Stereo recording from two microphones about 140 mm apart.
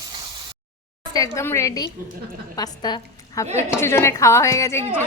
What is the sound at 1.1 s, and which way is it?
A woman's voice, 20° left (ahead or behind).